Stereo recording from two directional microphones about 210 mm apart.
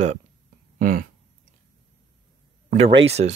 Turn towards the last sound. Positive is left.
turn(degrees=-30)  # may be behind; listen again after turning